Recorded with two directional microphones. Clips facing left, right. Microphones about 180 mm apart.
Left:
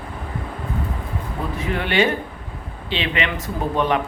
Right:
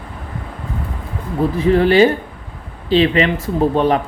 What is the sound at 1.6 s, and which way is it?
Speech, 35° right (ahead or behind).